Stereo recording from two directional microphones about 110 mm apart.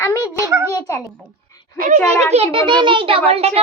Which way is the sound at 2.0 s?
70° right (ahead or behind).